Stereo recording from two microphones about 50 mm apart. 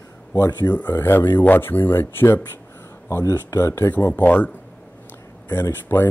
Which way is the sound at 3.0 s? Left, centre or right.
Left.